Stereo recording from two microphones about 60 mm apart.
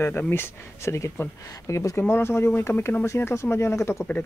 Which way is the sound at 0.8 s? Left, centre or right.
Left.